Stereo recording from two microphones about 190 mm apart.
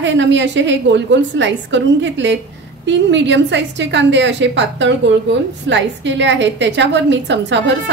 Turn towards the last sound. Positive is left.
turn(degrees=-70)  # may be behind; listen again after turning